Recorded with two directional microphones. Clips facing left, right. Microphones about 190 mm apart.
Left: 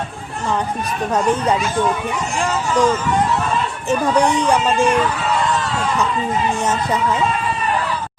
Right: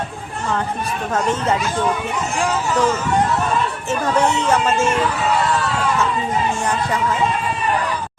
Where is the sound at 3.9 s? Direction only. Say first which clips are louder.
Left 3 dB; 15° left (ahead or behind).